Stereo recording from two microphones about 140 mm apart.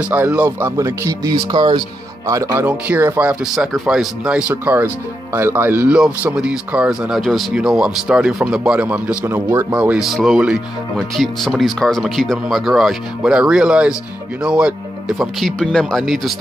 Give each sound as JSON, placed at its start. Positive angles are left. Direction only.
{"t": 0.0, "sound": "speech", "side_deg": -15}